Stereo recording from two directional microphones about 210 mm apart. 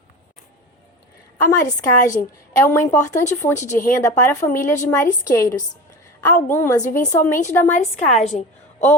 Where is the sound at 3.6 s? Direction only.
40° left (ahead or behind).